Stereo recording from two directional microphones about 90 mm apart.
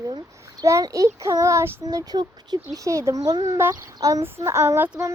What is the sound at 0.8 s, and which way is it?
Child singing, 40° right (ahead or behind).